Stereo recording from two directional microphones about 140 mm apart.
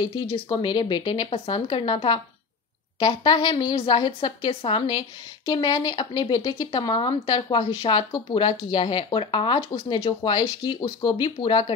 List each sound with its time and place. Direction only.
0.0 s a woman's voice: 35° left (ahead or behind)